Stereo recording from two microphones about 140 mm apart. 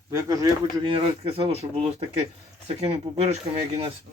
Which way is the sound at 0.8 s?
40° right (ahead or behind).